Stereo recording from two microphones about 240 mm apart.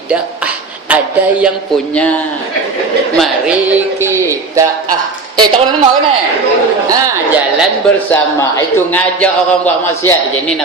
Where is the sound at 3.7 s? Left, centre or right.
Centre.